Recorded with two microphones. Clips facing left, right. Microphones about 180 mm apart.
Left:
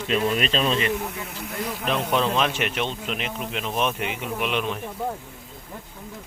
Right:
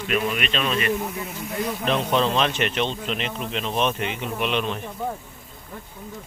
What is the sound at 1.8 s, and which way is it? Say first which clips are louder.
Speech: right 1 dB; 10° left (ahead or behind).